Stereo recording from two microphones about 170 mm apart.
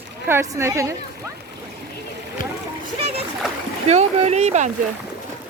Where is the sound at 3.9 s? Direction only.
40° right (ahead or behind).